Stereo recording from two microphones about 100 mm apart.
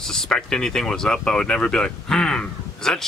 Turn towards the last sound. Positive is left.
turn(degrees=5)  # may be behind; listen again after turning